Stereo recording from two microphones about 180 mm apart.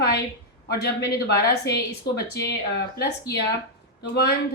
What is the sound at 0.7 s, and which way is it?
A woman's voice, 65° left (ahead or behind).